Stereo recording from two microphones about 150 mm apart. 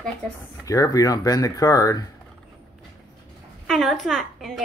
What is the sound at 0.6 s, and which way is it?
Speech, 20° left (ahead or behind).